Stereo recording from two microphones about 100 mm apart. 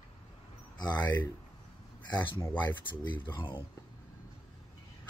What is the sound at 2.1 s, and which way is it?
Speech, 50° left (ahead or behind).